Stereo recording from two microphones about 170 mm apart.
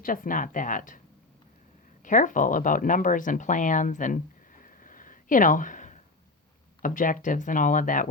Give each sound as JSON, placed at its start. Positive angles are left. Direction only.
{"t": 0.0, "sound": "speech", "side_deg": 55}
{"t": 2.0, "sound": "speech", "side_deg": 50}